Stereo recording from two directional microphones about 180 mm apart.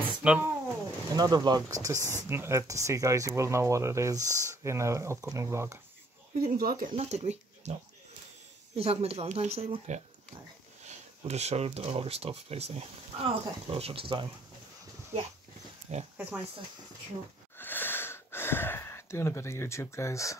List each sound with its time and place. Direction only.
0.2 s a sound: 5° right (ahead or behind)
1.1 s speech: 20° right (ahead or behind)
6.4 s speech: 55° right (ahead or behind); by 7.7 s 40° right (ahead or behind)
8.7 s speech: 35° right (ahead or behind)
15.9 s speech: 40° right (ahead or behind)
17.6 s a sound: 10° left (ahead or behind)